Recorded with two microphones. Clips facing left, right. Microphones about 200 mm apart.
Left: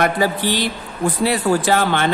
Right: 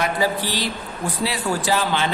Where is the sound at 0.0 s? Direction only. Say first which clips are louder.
Left 4 dB; 60° left (ahead or behind).